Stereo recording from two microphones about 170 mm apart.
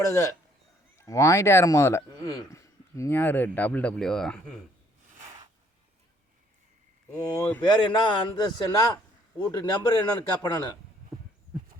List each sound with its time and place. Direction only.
0.0 s a man's voice: 20° left (ahead or behind); by 4.5 s 5° left (ahead or behind)
7.1 s speech: 10° left (ahead or behind)
7.7 s a man's voice: 25° left (ahead or behind)